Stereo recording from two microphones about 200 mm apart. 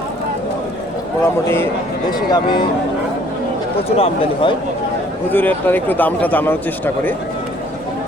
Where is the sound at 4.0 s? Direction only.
25° left (ahead or behind).